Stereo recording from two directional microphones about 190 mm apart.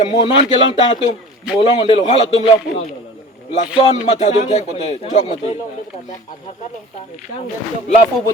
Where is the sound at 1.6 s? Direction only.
30° left (ahead or behind).